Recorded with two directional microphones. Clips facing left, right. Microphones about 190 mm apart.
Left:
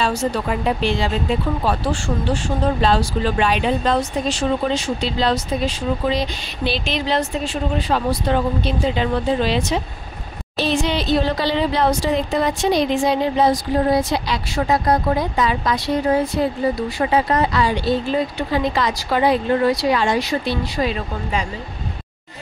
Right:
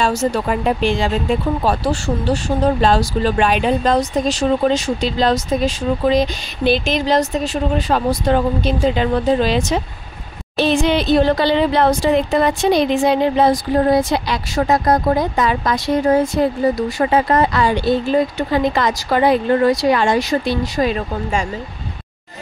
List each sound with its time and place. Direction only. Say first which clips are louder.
0.0 s speech: right 3 dB; 45° right (ahead or behind)
10.6 s speech: right 5 dB; 55° right (ahead or behind)